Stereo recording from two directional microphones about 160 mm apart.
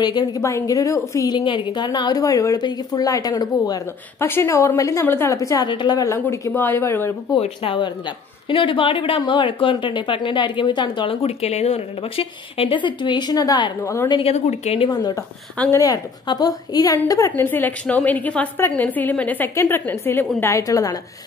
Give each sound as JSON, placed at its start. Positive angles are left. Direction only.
{"t": 0.0, "sound": "a woman's voice", "side_deg": 25}
{"t": 7.3, "sound": "speech", "side_deg": 35}
{"t": 14.1, "sound": "speech", "side_deg": 40}
{"t": 14.9, "sound": "a woman's voice", "side_deg": 25}
{"t": 15.5, "sound": "a woman's voice", "side_deg": 10}
{"t": 15.8, "sound": "a woman's voice", "side_deg": 25}